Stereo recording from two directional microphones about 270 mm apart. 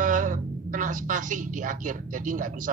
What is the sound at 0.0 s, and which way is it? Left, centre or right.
Speech, right.